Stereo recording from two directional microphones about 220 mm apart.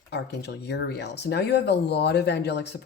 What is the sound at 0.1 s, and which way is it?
Speech, 50° left (ahead or behind).